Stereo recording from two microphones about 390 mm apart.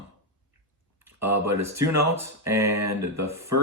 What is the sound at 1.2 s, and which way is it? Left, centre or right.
Speech, centre.